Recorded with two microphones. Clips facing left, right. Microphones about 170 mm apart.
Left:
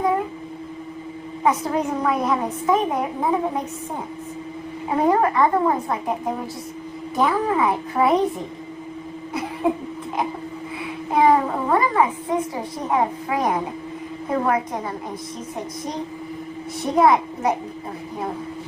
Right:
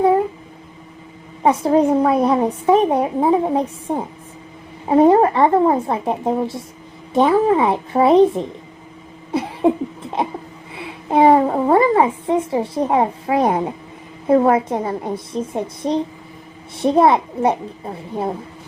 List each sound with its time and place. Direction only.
1.5 s a woman's voice: 30° right (ahead or behind)
9.3 s cough: 30° right (ahead or behind)
10.2 s a woman's voice: 30° right (ahead or behind)